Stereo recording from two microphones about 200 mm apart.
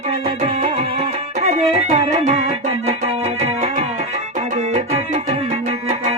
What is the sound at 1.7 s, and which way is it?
Music, 30° right (ahead or behind).